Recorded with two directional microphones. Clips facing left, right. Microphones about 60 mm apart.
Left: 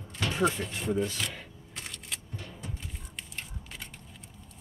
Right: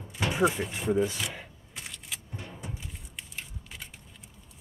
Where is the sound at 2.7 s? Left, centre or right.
Centre.